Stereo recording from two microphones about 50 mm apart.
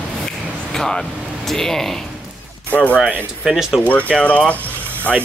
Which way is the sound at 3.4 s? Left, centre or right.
Centre.